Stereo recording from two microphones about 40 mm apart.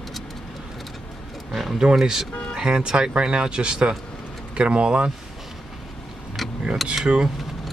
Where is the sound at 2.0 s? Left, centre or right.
Centre.